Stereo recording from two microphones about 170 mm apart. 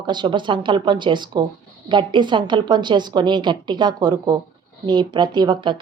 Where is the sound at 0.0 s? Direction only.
25° right (ahead or behind).